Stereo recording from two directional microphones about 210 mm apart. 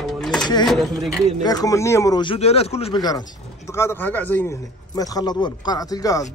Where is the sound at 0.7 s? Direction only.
Centre (ahead or behind).